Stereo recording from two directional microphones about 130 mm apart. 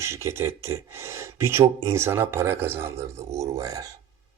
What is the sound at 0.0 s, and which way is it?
Speech, 20° right (ahead or behind).